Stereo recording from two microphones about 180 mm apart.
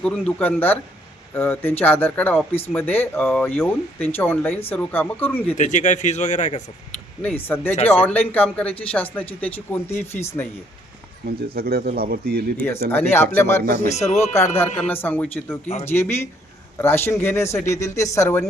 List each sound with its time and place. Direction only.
0.0 s speech: 10° left (ahead or behind)
5.5 s speech: 45° left (ahead or behind)
7.2 s speech: 10° left (ahead or behind)
11.3 s speech: 55° right (ahead or behind)
12.9 s speech: 10° left (ahead or behind)
13.8 s speech: 40° left (ahead or behind)
14.8 s speech: 10° left (ahead or behind)